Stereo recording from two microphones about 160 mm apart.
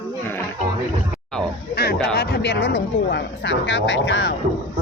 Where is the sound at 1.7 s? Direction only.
80° left.